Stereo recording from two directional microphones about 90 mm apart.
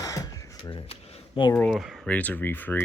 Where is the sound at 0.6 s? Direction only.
80° left.